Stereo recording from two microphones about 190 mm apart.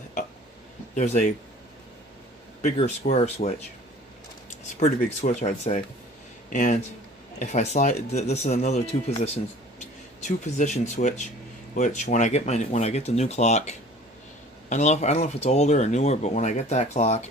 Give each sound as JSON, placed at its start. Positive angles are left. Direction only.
{"t": 0.9, "sound": "speech", "side_deg": 35}
{"t": 2.6, "sound": "speech", "side_deg": 35}
{"t": 5.2, "sound": "speech", "side_deg": 40}